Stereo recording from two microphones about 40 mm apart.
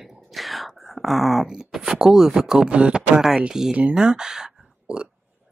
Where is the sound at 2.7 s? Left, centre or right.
Right.